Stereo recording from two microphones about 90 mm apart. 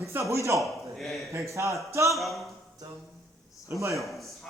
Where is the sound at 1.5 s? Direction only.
35° right (ahead or behind).